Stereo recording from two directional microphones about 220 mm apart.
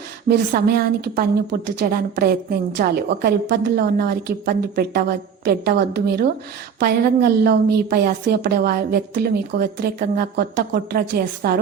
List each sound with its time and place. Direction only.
0.3 s a woman's voice: 45° right (ahead or behind)